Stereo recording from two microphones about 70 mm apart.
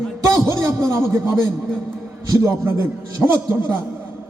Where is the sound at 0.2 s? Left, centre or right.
Right.